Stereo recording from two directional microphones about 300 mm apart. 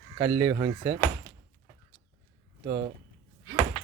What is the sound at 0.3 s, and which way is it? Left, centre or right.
Speech, centre.